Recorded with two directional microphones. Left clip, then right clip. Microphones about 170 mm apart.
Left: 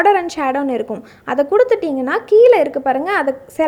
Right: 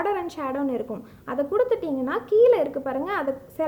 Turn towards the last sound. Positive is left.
turn(degrees=30)  # may be behind; listen again after turning